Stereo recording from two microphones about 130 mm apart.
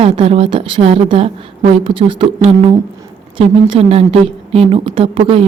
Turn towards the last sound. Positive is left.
turn(degrees=-45)  # may be behind; listen again after turning